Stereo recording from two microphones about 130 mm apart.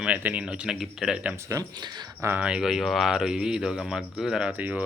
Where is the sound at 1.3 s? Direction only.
25° right (ahead or behind).